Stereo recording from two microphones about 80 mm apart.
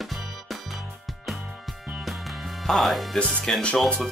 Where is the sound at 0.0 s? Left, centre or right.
Centre.